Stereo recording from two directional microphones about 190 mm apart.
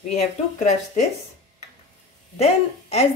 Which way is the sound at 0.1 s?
40° left (ahead or behind).